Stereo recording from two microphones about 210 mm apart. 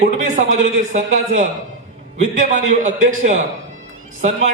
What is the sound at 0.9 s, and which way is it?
Speech, 35° right (ahead or behind).